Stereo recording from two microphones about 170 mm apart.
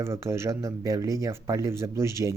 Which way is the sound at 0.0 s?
15° right (ahead or behind).